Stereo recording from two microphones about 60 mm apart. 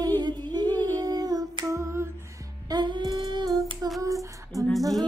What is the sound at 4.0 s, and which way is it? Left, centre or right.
Female singing, right.